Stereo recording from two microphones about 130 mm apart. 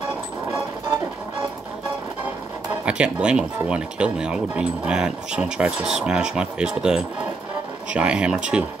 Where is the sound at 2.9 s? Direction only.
10° right (ahead or behind).